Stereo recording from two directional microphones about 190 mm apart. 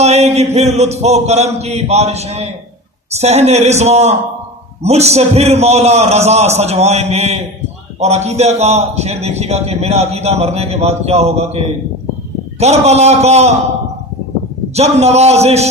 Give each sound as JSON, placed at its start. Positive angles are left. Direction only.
{"t": 0.0, "sound": "a man's voice", "side_deg": -35}
{"t": 14.8, "sound": "a man's voice", "side_deg": -35}